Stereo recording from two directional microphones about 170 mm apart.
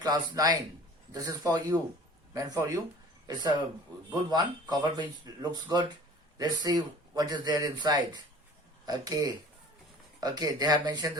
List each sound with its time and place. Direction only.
0.0 s speech: 20° right (ahead or behind)
4.1 s speech: 25° right (ahead or behind)